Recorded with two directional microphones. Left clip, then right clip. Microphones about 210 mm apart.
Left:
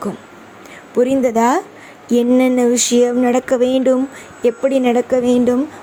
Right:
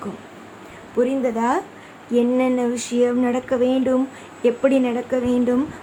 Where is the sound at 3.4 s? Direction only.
35° left (ahead or behind).